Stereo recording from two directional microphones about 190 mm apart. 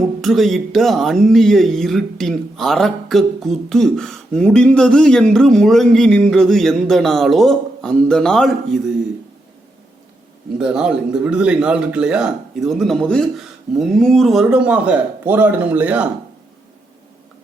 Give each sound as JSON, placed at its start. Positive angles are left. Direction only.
{"t": 0.2, "sound": "speech", "side_deg": 0}
{"t": 10.6, "sound": "speech", "side_deg": -5}